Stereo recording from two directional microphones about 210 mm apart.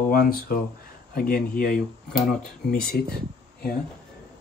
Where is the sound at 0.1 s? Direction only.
45° left (ahead or behind).